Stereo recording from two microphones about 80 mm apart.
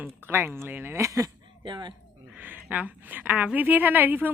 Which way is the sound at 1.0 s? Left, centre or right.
Right.